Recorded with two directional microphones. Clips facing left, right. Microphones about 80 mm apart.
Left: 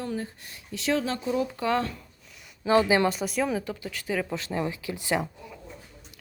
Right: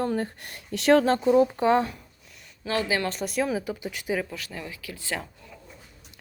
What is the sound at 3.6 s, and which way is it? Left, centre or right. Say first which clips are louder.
Speech: right 2 dB; centre.